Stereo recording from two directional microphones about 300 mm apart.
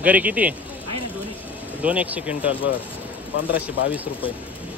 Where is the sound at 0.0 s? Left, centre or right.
Centre.